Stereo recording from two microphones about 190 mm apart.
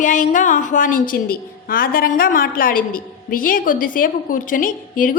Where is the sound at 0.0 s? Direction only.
40° left (ahead or behind).